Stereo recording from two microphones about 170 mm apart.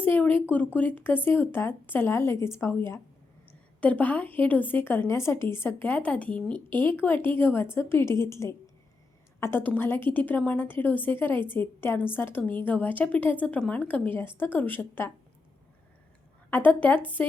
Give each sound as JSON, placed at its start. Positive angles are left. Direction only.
{"t": 0.0, "sound": "a sound", "side_deg": 10}
{"t": 0.5, "sound": "a woman's voice", "side_deg": 10}
{"t": 16.5, "sound": "a woman's voice", "side_deg": 10}